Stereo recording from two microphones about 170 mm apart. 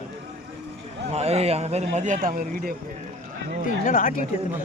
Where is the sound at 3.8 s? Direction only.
50° left (ahead or behind).